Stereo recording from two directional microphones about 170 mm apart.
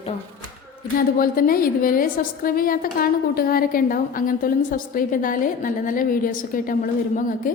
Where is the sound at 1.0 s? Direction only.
55° left (ahead or behind).